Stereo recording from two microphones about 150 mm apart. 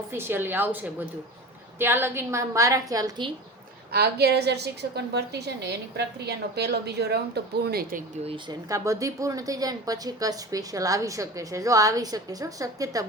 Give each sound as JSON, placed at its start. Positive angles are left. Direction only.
{"t": 0.1, "sound": "a woman's voice", "side_deg": -15}
{"t": 3.9, "sound": "a woman's voice", "side_deg": -90}
{"t": 8.2, "sound": "speech", "side_deg": -40}
{"t": 8.7, "sound": "a woman's voice", "side_deg": -20}